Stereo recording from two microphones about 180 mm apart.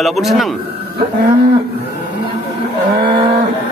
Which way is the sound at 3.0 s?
25° right (ahead or behind).